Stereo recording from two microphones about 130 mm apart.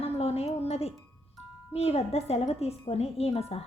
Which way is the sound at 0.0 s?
50° left (ahead or behind).